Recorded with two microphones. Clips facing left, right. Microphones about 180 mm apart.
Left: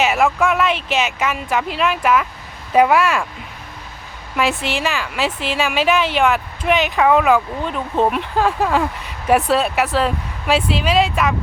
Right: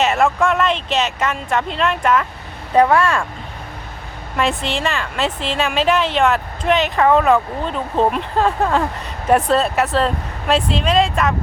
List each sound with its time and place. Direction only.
0.0 s a woman's voice: centre (ahead or behind)
4.4 s a woman's voice: 5° left (ahead or behind)